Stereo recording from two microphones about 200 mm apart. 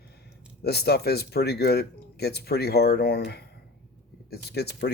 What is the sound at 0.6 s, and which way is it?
Speech, 55° left (ahead or behind).